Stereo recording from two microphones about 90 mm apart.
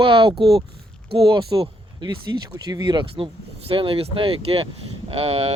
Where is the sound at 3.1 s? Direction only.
80° right.